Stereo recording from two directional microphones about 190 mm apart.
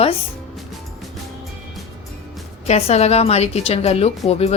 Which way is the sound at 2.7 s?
35° left (ahead or behind).